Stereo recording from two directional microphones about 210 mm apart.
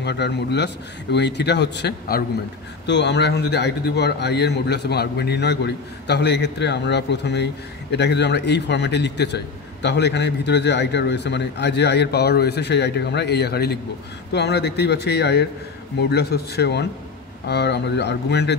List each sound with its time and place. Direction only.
0.0 s a man's voice: 55° left (ahead or behind)